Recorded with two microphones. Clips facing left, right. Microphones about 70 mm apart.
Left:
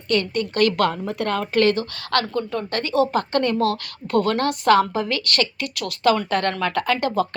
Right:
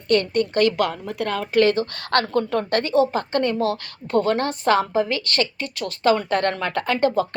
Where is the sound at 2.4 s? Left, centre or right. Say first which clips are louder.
Right 4 dB; right.